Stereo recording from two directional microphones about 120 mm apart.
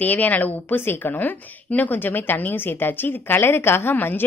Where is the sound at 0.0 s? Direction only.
15° left (ahead or behind).